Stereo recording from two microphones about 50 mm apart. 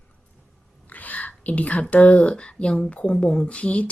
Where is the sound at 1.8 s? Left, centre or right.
Left.